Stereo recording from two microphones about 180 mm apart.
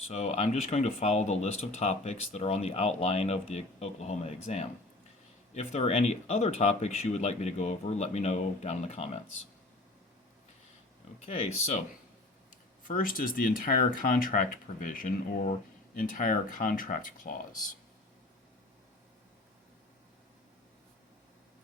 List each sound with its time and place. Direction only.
0.0 s speech: 40° left (ahead or behind)
11.2 s speech: 35° left (ahead or behind)
12.9 s speech: 50° left (ahead or behind)